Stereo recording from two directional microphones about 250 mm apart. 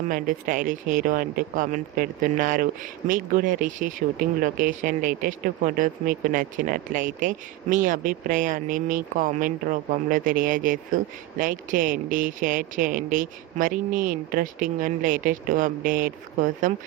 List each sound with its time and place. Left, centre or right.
0.1 s speech: right